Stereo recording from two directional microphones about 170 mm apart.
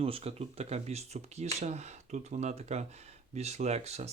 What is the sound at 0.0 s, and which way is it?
Speech, 35° right (ahead or behind).